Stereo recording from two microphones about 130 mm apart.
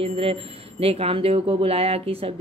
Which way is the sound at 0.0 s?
45° right (ahead or behind).